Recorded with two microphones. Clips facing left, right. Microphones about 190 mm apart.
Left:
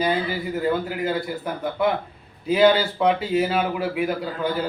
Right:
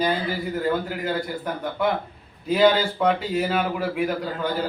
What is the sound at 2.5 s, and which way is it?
A man's voice, 5° left (ahead or behind).